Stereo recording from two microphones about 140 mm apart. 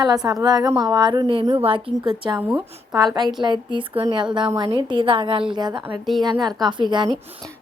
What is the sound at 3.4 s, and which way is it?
A woman's voice, 35° right (ahead or behind).